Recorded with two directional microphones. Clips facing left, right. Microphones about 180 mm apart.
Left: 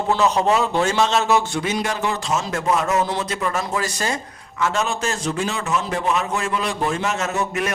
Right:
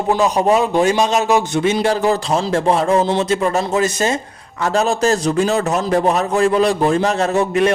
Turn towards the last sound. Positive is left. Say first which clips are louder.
# right 8 dB
turn(degrees=-30)  # may be behind; listen again after turning